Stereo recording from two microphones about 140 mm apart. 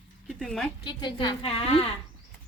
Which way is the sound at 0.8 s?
35° left (ahead or behind).